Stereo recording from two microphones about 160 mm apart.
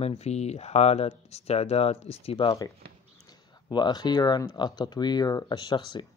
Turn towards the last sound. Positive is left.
turn(degrees=30)  # may be behind; listen again after turning